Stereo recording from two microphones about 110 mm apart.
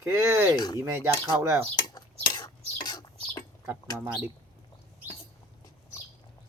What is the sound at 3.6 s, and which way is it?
Speech, 15° right (ahead or behind).